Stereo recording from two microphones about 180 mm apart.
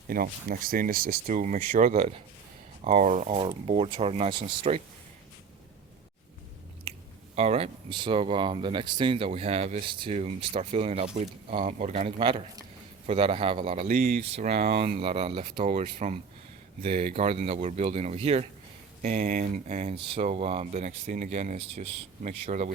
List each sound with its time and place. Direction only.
0.1 s speech: 55° right (ahead or behind); by 4.8 s 30° right (ahead or behind)
7.3 s speech: 35° right (ahead or behind)
13.9 s speech: 55° right (ahead or behind)
14.3 s speech: 35° right (ahead or behind)
15.6 s speech: 40° right (ahead or behind)